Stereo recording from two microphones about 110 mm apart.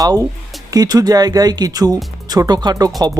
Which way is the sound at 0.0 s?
30° right (ahead or behind).